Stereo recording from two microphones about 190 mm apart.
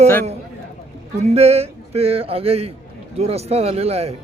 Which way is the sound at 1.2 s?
35° right (ahead or behind).